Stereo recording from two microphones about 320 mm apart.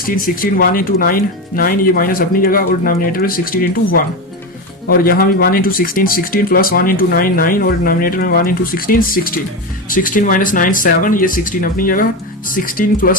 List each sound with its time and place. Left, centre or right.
0.0 s speech: left
4.9 s speech: left